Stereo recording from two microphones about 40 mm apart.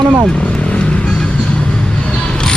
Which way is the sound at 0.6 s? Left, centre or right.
Left.